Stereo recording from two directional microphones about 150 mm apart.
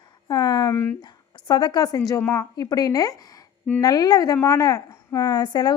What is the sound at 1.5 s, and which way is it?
Speech, 25° left (ahead or behind).